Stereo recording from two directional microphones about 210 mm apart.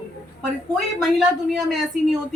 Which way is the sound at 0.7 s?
Centre (ahead or behind).